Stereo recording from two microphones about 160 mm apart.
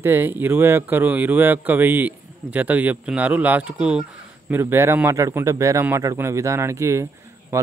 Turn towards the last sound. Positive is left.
turn(degrees=-15)  # may be behind; listen again after turning